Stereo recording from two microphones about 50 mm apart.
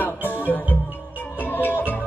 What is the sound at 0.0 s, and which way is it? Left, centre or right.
Music, left.